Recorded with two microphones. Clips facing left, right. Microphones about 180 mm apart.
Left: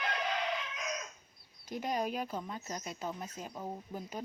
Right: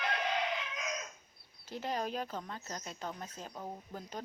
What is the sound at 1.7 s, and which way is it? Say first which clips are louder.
Speech: left 2 dB; 15° left (ahead or behind).